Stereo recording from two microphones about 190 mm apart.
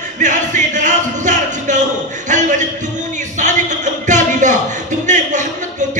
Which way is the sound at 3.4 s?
40° right (ahead or behind).